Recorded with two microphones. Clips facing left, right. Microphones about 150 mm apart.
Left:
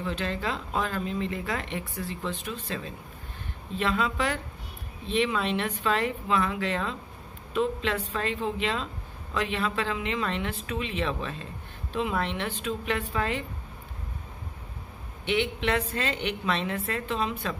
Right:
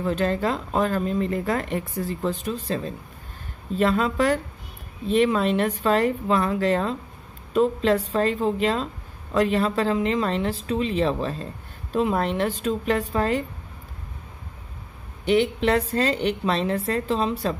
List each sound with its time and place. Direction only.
0.0 s a woman's voice: 45° right (ahead or behind)
15.2 s a woman's voice: 40° right (ahead or behind)